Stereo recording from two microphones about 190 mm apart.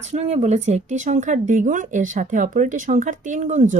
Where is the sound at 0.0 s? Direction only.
35° right (ahead or behind).